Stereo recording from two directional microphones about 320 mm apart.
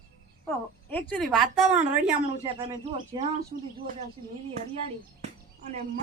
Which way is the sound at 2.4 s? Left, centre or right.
Centre.